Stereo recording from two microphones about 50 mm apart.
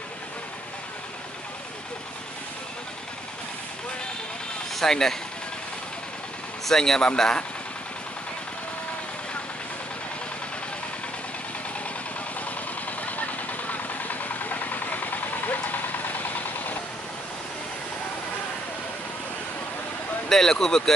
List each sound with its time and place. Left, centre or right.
4.7 s speech: centre
6.6 s speech: centre
13.0 s vehicle: left
20.2 s speech: centre